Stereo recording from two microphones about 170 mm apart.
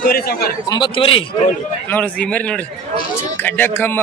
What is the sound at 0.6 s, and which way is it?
Speech, 25° left (ahead or behind).